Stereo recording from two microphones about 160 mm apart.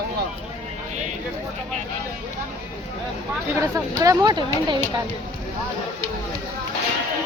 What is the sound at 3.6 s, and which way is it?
Speech, 25° right (ahead or behind).